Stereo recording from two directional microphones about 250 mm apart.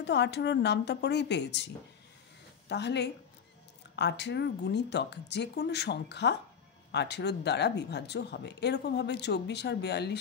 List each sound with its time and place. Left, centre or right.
0.0 s speech: left
2.7 s speech: left